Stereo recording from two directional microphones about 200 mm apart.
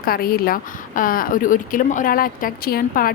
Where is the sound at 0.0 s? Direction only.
45° left (ahead or behind).